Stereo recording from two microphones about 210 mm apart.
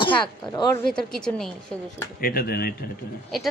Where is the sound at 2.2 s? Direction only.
45° left (ahead or behind).